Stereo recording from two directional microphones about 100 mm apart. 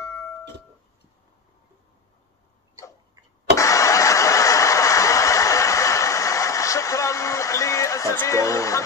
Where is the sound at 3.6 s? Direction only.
30° left (ahead or behind).